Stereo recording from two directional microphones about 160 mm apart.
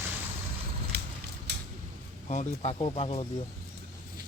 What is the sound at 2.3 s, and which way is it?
Speech, 45° left (ahead or behind).